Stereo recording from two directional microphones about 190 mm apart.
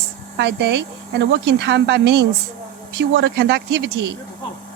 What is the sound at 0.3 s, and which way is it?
Speech, 60° right (ahead or behind).